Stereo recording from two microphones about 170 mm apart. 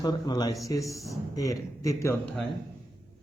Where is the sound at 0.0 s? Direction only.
25° left (ahead or behind).